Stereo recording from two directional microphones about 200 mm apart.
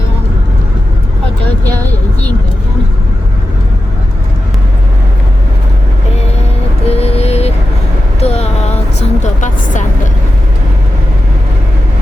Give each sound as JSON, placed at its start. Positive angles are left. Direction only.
{"t": 6.8, "sound": "music", "side_deg": 30}
{"t": 8.2, "sound": "vehicle", "side_deg": 30}